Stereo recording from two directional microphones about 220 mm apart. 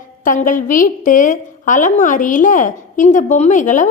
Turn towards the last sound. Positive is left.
turn(degrees=35)  # may be behind; listen again after turning